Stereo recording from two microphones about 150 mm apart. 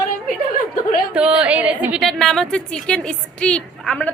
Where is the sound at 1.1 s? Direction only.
10° right (ahead or behind).